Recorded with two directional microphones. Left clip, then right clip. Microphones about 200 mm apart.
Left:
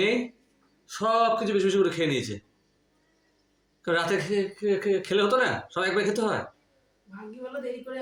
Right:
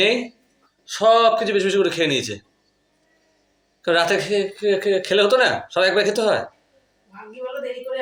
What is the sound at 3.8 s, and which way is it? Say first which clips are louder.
Speech: right 8 dB; 20° left (ahead or behind).